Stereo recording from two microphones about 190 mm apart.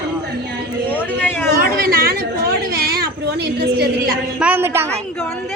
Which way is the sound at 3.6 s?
55° right (ahead or behind).